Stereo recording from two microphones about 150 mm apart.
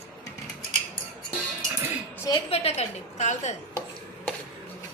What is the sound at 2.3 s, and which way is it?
A woman's voice, 40° left (ahead or behind).